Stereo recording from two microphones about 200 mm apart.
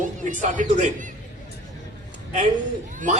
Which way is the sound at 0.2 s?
40° right (ahead or behind).